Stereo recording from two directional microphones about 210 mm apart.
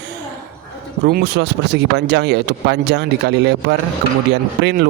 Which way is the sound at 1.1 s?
50° right (ahead or behind).